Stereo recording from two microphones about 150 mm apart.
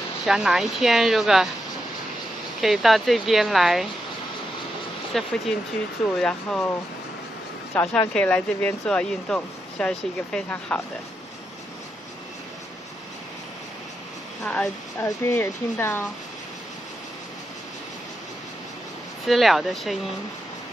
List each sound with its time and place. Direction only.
0.2 s speech: 5° right (ahead or behind)
2.6 s speech: centre (ahead or behind)
5.1 s speech: centre (ahead or behind)
7.7 s speech: 5° left (ahead or behind)
14.4 s speech: 10° left (ahead or behind)
19.2 s speech: centre (ahead or behind)